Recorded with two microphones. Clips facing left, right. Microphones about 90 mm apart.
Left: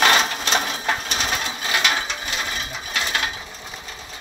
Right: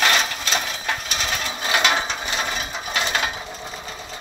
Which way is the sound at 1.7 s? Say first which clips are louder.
Right 3 dB; 15° right (ahead or behind).